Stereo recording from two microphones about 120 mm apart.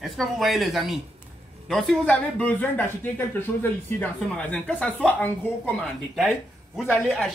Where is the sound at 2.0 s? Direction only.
10° left (ahead or behind).